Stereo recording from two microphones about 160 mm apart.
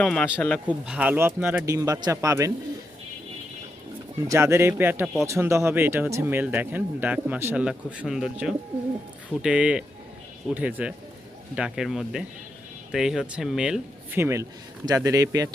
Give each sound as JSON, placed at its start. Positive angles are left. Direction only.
{"t": 0.0, "sound": "speech", "side_deg": 5}
{"t": 0.6, "sound": "speech", "side_deg": -10}
{"t": 4.3, "sound": "speech", "side_deg": -15}
{"t": 14.2, "sound": "speech", "side_deg": -15}